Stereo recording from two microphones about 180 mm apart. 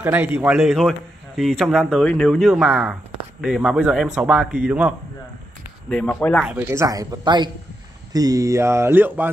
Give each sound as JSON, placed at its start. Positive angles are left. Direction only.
{"t": 0.0, "sound": "a man's voice", "side_deg": -10}
{"t": 5.9, "sound": "a man's voice", "side_deg": 5}
{"t": 6.4, "sound": "speech", "side_deg": -10}